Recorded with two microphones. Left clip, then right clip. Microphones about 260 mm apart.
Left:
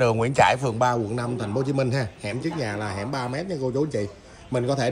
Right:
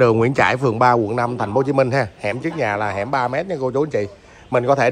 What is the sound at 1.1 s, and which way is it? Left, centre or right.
A man's voice, centre.